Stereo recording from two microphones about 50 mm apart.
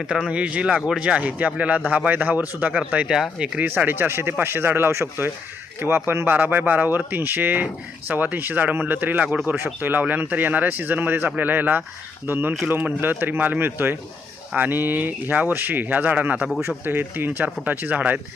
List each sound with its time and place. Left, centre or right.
0.3 s speech: right
3.1 s speech: centre
3.8 s speech: right
16.8 s speech: right